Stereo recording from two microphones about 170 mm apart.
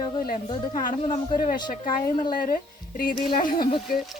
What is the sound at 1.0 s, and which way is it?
Speech, 55° left (ahead or behind).